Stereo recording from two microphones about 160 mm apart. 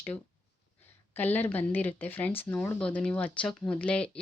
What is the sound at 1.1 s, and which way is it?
Speech, 10° left (ahead or behind).